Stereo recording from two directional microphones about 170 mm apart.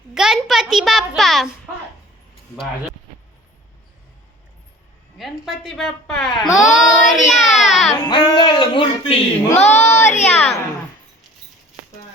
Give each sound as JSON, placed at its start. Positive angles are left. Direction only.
{"t": 0.1, "sound": "a child's voice", "side_deg": -5}
{"t": 5.1, "sound": "a woman's voice", "side_deg": 0}
{"t": 7.4, "sound": "a sound", "side_deg": 45}
{"t": 8.1, "sound": "speech", "side_deg": 25}
{"t": 9.6, "sound": "speech", "side_deg": 40}